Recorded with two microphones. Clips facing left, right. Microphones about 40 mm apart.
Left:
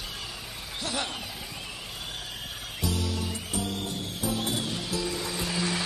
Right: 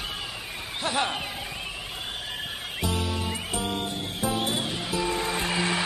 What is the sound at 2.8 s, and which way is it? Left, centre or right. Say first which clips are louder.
Music: right 2 dB; right.